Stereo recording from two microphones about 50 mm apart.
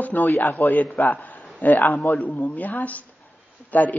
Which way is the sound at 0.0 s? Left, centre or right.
Left.